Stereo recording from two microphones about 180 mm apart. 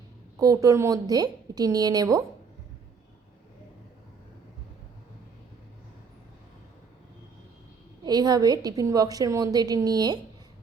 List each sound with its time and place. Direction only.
0.3 s a woman's voice: 20° right (ahead or behind)
8.0 s a woman's voice: 20° right (ahead or behind)